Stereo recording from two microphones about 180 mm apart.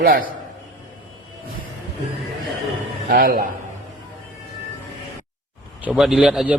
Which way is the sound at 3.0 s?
50° right (ahead or behind).